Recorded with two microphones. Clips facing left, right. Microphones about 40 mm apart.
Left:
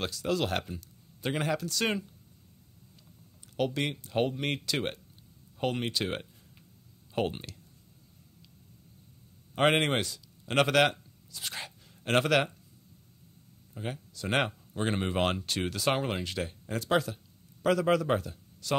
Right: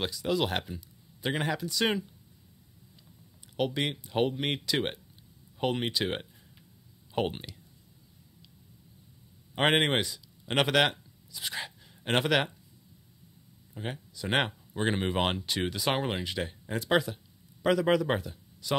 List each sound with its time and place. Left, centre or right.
0.0 s a man's voice: centre
3.5 s speech: centre
7.2 s speech: centre
9.6 s speech: centre
13.7 s speech: centre